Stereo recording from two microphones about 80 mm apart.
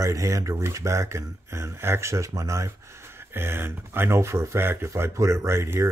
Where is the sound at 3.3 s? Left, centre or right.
Right.